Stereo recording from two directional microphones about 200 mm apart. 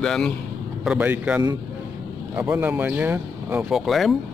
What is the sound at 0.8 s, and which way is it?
Speech, 10° right (ahead or behind).